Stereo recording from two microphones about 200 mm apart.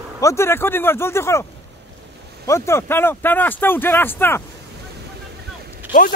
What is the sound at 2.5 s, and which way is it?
Speech, 15° left (ahead or behind).